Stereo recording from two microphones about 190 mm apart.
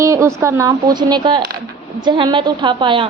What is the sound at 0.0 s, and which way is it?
A woman's voice, 15° right (ahead or behind).